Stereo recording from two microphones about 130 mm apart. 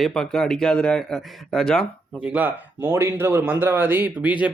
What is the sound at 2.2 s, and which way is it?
Speech, 10° right (ahead or behind).